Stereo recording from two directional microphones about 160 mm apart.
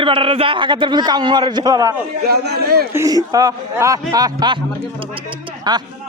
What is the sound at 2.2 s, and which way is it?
Speech, 90° right.